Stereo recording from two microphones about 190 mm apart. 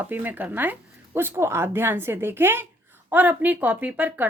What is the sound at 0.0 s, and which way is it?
Speech, 10° right (ahead or behind).